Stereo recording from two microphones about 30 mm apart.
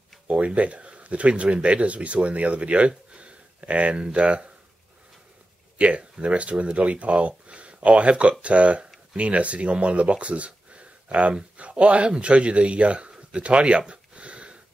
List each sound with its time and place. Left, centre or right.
0.6 s speech: right
3.1 s a sound: right
5.8 s speech: right
6.5 s speech: right
6.8 s speech: right
13.1 s a sound: right